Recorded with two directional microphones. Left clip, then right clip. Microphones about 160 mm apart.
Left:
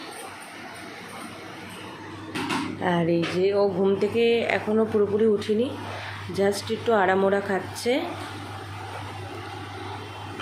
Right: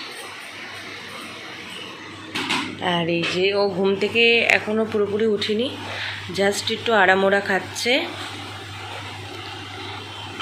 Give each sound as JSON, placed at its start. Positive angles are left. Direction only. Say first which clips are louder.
{"t": 2.8, "sound": "speech", "louder": "right 1 dB", "side_deg": 20}
{"t": 4.7, "sound": "speech", "louder": "right 1 dB", "side_deg": 5}